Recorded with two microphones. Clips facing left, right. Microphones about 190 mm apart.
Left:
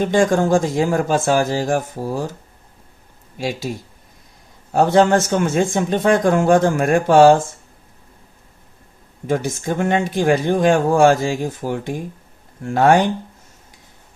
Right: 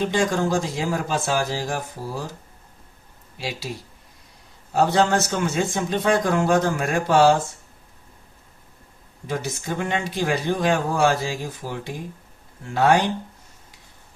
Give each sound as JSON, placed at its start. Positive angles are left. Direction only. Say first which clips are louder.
{"t": 0.0, "sound": "speech", "louder": "left 6 dB", "side_deg": 50}
{"t": 3.3, "sound": "speech", "louder": "left 7 dB", "side_deg": 50}
{"t": 4.7, "sound": "speech", "louder": "left 5 dB", "side_deg": 50}
{"t": 9.2, "sound": "speech", "louder": "left 7 dB", "side_deg": 50}